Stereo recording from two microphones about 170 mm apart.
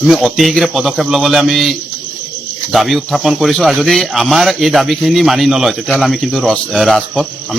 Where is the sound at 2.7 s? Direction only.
Centre (ahead or behind).